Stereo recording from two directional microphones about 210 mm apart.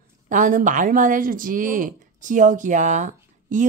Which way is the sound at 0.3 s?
40° right (ahead or behind).